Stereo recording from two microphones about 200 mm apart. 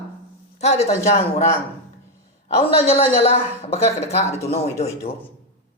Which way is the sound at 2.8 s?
30° left (ahead or behind).